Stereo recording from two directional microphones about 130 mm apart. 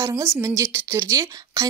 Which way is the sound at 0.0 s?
20° right (ahead or behind).